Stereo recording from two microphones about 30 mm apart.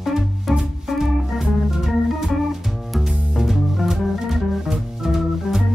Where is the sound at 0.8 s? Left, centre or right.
Centre.